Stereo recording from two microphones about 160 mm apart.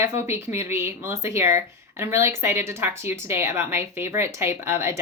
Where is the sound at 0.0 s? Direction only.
15° right (ahead or behind).